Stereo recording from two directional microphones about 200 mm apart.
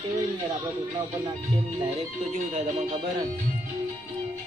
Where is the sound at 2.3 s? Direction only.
35° right (ahead or behind).